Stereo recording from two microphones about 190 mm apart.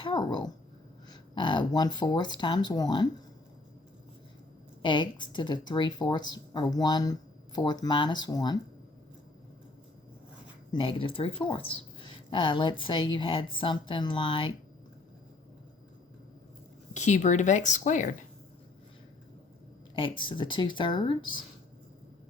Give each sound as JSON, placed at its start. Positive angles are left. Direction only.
{"t": 0.0, "sound": "speech", "side_deg": 25}
{"t": 4.8, "sound": "speech", "side_deg": 25}
{"t": 10.7, "sound": "speech", "side_deg": 25}
{"t": 16.9, "sound": "speech", "side_deg": 40}
{"t": 20.0, "sound": "speech", "side_deg": 25}